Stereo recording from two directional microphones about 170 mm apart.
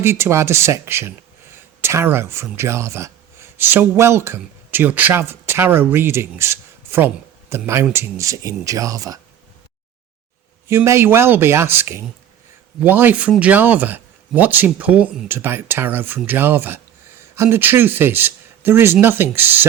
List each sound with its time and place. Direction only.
0.0 s speech: 15° right (ahead or behind)
10.7 s speech: 15° right (ahead or behind)